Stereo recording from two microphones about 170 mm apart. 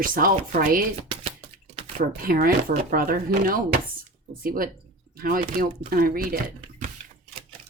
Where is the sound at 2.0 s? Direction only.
60° right (ahead or behind).